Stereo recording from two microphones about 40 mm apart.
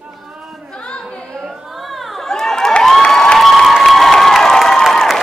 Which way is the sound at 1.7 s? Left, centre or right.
Centre.